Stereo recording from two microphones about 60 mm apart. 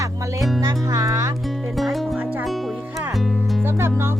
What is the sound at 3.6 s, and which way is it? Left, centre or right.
Music, right.